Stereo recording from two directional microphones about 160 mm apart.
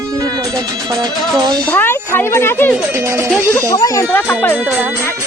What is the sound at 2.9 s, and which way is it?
Music, 15° right (ahead or behind).